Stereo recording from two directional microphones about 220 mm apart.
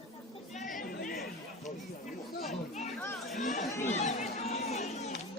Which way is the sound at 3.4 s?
35° left (ahead or behind).